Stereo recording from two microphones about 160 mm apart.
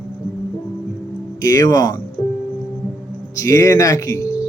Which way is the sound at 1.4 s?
20° left (ahead or behind).